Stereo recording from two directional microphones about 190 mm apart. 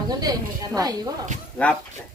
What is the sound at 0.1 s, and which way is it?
Speech, 20° right (ahead or behind).